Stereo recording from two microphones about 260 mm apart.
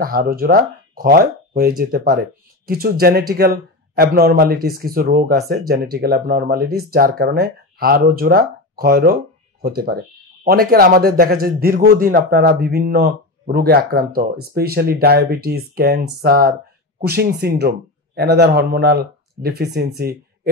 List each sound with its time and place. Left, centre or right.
0.0 s speech: right